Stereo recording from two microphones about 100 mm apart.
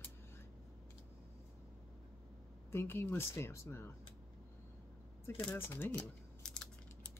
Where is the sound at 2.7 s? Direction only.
25° left (ahead or behind).